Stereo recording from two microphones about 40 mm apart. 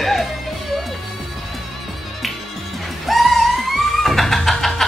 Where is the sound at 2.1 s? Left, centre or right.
Centre.